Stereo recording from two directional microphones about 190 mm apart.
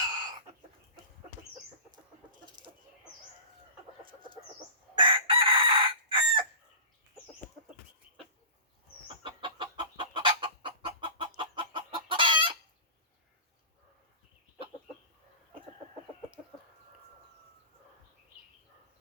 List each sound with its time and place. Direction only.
4.9 s chicken: 25° right (ahead or behind)
9.2 s chicken: 25° right (ahead or behind)